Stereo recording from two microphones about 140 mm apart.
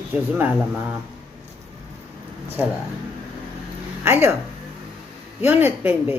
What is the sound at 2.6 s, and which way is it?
Speech, 15° right (ahead or behind).